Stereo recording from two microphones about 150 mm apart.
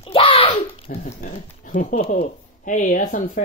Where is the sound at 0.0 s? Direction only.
40° left (ahead or behind).